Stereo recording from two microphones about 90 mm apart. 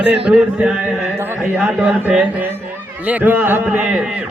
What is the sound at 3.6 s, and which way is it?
Speech, 10° right (ahead or behind).